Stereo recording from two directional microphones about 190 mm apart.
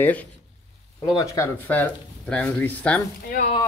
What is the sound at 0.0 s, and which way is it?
Speech, 10° left (ahead or behind).